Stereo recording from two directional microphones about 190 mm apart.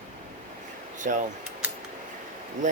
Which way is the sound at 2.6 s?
40° right (ahead or behind).